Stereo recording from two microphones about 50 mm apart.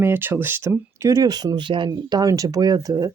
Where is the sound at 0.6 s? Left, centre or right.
Right.